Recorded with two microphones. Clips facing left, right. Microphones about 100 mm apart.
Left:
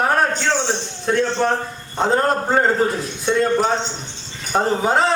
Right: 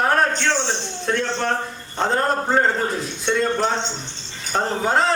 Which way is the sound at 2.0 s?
5° left (ahead or behind).